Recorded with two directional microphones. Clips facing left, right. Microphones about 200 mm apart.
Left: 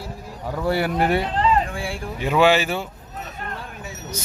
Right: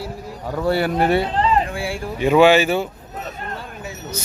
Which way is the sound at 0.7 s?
15° left (ahead or behind).